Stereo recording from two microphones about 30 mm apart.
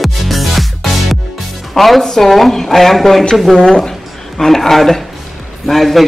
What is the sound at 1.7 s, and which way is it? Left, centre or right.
A woman's voice, centre.